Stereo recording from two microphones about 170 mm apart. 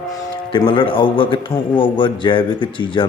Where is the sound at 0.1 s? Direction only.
30° left (ahead or behind).